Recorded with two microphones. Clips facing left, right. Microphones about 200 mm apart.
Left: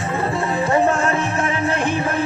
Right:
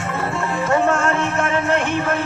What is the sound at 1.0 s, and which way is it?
Music, 15° left (ahead or behind).